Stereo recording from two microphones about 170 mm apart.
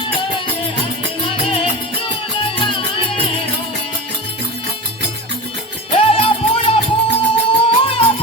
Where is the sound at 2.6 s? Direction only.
30° left (ahead or behind).